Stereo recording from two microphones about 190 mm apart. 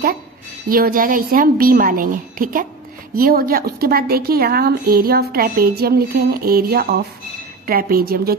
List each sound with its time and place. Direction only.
0.7 s a woman's voice: 50° right (ahead or behind)